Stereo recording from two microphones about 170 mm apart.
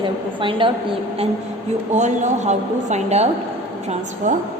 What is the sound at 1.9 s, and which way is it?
A woman's voice, 45° right (ahead or behind).